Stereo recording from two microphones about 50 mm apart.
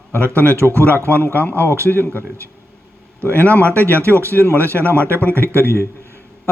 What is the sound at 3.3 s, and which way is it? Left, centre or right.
A man's voice, right.